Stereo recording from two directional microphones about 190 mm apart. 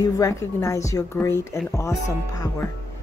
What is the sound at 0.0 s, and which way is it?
A woman's voice, 15° left (ahead or behind).